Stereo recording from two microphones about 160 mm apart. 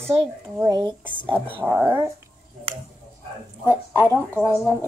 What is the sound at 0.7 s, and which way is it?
Speech, 25° right (ahead or behind).